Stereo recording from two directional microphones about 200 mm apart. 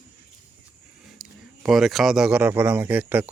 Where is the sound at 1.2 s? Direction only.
Centre (ahead or behind).